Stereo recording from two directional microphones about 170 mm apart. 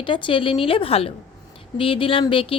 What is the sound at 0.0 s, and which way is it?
A woman's voice, 30° left (ahead or behind).